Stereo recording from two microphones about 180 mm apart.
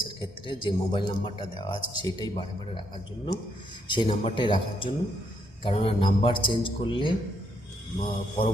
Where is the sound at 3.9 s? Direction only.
30° left (ahead or behind).